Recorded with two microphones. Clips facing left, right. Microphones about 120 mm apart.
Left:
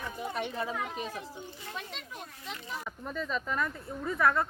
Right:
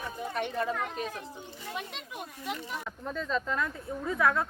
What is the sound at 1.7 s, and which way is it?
Speech, 10° right (ahead or behind).